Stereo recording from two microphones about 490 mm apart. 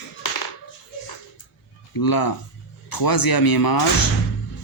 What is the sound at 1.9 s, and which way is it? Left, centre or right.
Speech, left.